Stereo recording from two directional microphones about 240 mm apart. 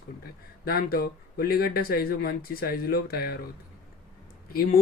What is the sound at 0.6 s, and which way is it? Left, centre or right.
Speech, left.